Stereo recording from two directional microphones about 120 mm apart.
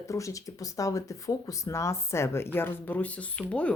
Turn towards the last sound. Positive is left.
turn(degrees=10)  # may be behind; listen again after turning